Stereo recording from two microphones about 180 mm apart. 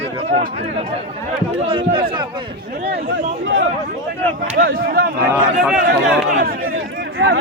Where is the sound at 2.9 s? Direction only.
75° right (ahead or behind).